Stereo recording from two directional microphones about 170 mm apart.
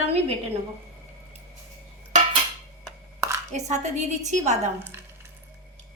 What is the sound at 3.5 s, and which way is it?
A woman's voice, 45° right (ahead or behind).